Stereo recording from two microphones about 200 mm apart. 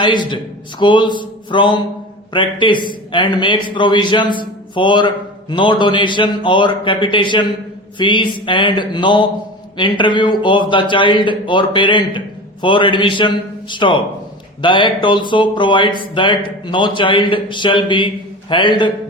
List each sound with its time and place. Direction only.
0.0 s speech: 25° left (ahead or behind)